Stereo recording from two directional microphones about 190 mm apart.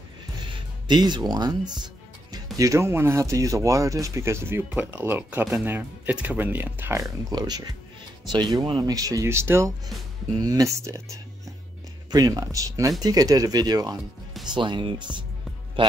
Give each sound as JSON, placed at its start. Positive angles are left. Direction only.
{"t": 0.8, "sound": "speech", "side_deg": -20}